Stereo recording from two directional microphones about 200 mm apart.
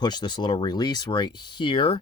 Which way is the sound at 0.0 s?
20° left (ahead or behind).